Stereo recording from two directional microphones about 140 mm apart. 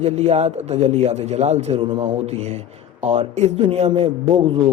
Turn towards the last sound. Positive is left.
turn(degrees=-45)  # may be behind; listen again after turning